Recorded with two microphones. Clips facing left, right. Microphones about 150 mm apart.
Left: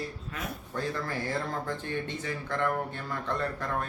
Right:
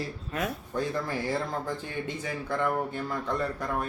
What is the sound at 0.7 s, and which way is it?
Speech, 10° right (ahead or behind).